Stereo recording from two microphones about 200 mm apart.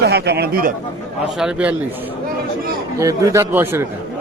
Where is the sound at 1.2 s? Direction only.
5° right (ahead or behind).